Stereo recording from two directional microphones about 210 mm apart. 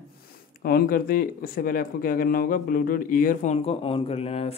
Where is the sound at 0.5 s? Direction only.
45° left (ahead or behind).